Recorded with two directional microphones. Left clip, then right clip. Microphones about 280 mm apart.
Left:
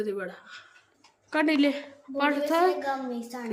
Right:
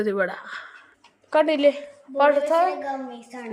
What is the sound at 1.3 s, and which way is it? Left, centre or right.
A woman's voice, centre.